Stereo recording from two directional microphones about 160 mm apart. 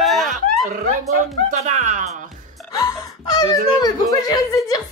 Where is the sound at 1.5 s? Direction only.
50° right (ahead or behind).